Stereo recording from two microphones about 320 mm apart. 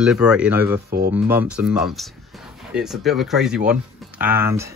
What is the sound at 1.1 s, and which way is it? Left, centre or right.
Speech, centre.